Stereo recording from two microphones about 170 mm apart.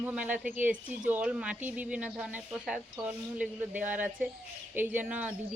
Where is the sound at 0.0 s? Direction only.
10° right (ahead or behind).